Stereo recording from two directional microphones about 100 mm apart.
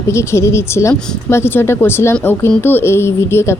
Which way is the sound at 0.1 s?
30° left (ahead or behind).